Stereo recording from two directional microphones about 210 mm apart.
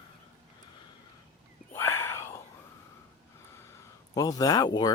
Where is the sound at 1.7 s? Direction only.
10° left (ahead or behind).